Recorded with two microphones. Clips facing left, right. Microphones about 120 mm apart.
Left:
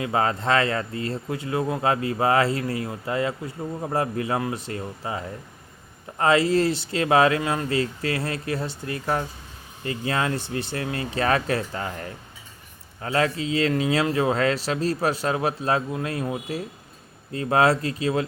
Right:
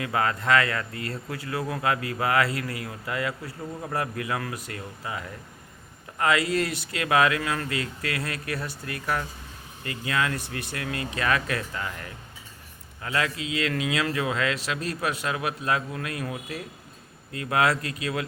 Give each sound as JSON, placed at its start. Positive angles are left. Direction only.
{"t": 0.0, "sound": "speech", "side_deg": 25}